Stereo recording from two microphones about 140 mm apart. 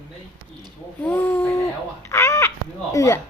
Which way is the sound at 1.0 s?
10° left (ahead or behind).